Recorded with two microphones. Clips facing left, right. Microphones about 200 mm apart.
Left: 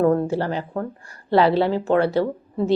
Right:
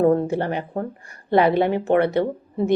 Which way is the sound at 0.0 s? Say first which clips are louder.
Right 1 dB; 20° right (ahead or behind).